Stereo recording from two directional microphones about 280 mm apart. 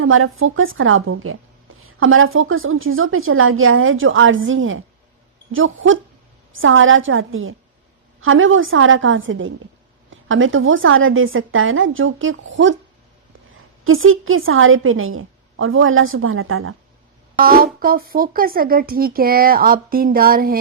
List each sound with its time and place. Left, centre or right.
0.0 s a woman's voice: right
13.8 s a woman's voice: right
17.4 s speech: right